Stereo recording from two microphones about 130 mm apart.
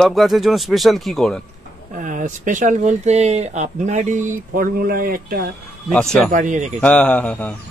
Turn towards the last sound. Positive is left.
turn(degrees=10)  # may be behind; listen again after turning